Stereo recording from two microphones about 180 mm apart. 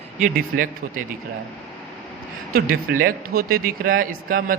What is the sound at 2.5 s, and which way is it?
A man's voice, 55° right (ahead or behind).